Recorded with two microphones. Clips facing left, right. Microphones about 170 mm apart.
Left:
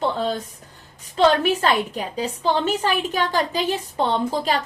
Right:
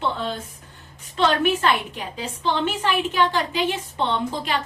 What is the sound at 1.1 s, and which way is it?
A woman's voice, 40° left (ahead or behind).